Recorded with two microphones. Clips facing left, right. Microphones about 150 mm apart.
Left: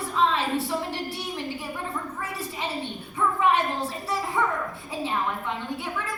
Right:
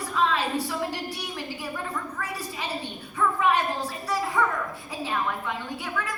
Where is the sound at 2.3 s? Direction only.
25° left (ahead or behind).